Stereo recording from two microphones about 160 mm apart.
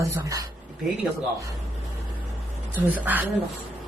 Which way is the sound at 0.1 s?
20° right (ahead or behind).